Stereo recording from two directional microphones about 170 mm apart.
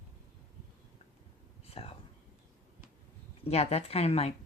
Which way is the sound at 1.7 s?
35° left (ahead or behind).